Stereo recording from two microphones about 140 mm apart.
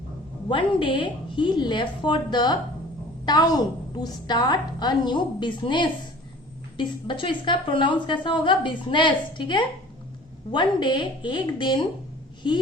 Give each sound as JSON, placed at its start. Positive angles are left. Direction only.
{"t": 0.4, "sound": "a woman's voice", "side_deg": 35}